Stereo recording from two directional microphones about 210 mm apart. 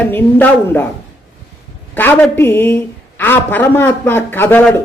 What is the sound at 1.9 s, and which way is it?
A woman's voice, 10° left (ahead or behind).